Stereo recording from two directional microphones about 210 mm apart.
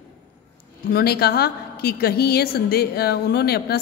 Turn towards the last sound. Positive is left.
turn(degrees=50)  # may be behind; listen again after turning